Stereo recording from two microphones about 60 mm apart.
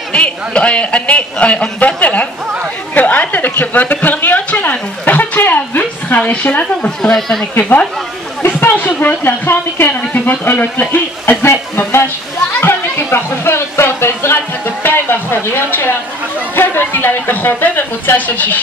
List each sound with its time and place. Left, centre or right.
0.1 s a woman's voice: centre
7.0 s speech: centre
8.4 s speech: left
12.5 s a sound: left
14.8 s speech: left